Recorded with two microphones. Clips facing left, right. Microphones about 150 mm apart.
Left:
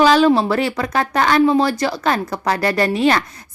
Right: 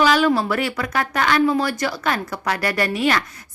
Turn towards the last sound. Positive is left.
turn(degrees=30)  # may be behind; listen again after turning